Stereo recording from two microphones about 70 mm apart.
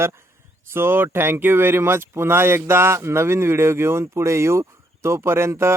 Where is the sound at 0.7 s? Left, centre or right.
Right.